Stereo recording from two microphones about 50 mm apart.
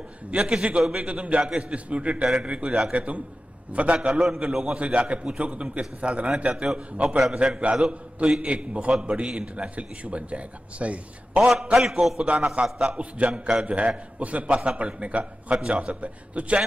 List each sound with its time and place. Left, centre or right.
0.3 s a man's voice: centre
4.0 s a man's voice: centre
4.7 s a man's voice: right
6.5 s a man's voice: centre
11.3 s a man's voice: centre
11.8 s a man's voice: centre
12.2 s a man's voice: right
15.5 s a man's voice: centre